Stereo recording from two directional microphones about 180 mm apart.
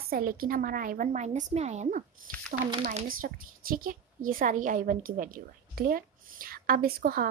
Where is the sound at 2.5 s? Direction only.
50° right (ahead or behind).